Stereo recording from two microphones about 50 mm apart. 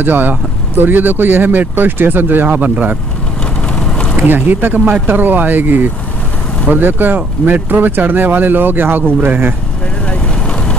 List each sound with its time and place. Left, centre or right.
0.0 s speech: right
3.8 s a sound: centre
4.2 s speech: right
4.7 s speech: right
5.0 s speech: right